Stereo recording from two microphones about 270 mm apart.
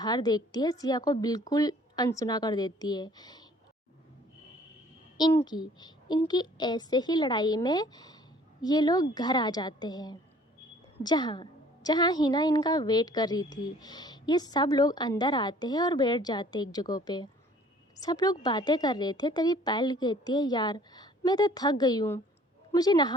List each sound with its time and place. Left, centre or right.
0.0 s a woman's voice: centre
5.1 s a woman's voice: centre